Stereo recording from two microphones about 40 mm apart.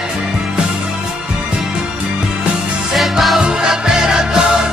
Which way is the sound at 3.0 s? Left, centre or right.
Centre.